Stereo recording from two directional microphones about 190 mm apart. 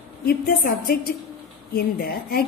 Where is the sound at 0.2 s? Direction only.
50° left (ahead or behind).